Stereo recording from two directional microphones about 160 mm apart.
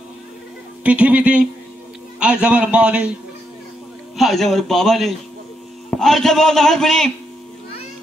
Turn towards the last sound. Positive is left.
turn(degrees=5)  # may be behind; listen again after turning